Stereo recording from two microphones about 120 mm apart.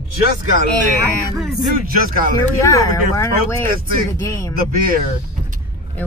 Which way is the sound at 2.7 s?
25° left (ahead or behind).